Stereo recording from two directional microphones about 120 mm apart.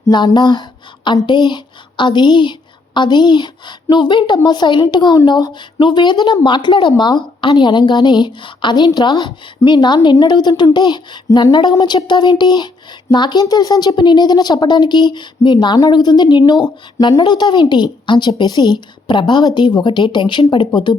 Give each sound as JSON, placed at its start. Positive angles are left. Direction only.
{"t": 0.1, "sound": "speech", "side_deg": 40}